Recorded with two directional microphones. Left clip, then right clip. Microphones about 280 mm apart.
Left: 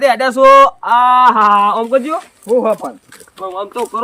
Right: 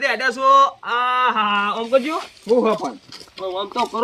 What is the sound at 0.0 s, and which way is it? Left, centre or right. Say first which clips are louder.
Speech: left 9 dB; left.